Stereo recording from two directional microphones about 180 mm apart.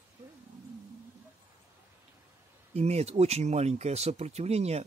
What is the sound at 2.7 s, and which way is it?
Speech, 35° right (ahead or behind).